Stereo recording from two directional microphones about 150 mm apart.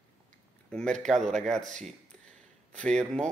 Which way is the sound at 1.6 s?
55° right (ahead or behind).